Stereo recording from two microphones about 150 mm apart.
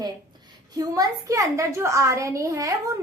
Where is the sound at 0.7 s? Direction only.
25° right (ahead or behind).